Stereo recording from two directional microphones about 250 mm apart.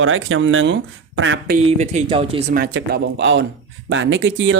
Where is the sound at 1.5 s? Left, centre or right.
Right.